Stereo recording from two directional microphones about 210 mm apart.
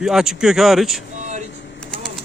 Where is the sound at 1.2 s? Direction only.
35° right (ahead or behind).